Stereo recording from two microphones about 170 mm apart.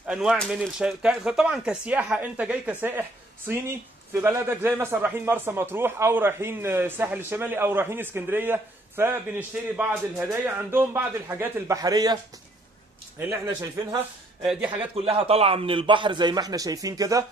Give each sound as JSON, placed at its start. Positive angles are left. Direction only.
{"t": 0.0, "sound": "a man's voice", "side_deg": -5}
{"t": 13.3, "sound": "a man's voice", "side_deg": -20}
{"t": 14.4, "sound": "speech", "side_deg": -5}
{"t": 15.0, "sound": "a man's voice", "side_deg": -35}